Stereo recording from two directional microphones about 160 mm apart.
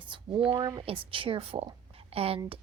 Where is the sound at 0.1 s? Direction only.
35° right (ahead or behind).